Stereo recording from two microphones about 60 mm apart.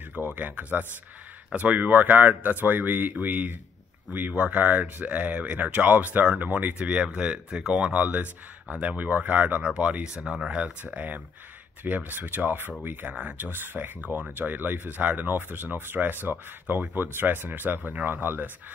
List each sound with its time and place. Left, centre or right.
0.1 s speech: right